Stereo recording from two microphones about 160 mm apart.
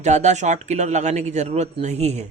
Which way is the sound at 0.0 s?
45° right (ahead or behind).